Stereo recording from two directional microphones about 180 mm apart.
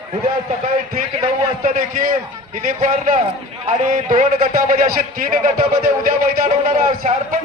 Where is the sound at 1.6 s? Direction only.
50° right (ahead or behind).